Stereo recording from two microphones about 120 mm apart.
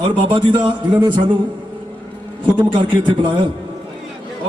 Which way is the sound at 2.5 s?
45° right (ahead or behind).